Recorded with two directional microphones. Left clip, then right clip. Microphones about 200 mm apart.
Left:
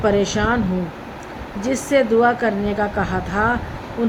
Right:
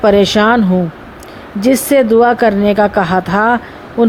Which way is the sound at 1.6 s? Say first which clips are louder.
Right 7 dB; 50° right (ahead or behind).